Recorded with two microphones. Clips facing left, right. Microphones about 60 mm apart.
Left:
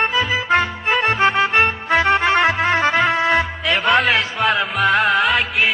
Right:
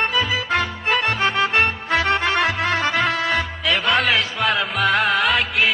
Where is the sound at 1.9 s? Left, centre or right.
Centre.